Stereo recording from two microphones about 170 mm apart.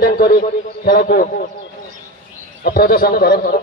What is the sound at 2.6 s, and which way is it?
Speech, 65° left (ahead or behind).